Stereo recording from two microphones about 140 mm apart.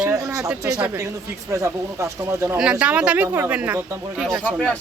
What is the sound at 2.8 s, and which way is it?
Speech, 10° right (ahead or behind).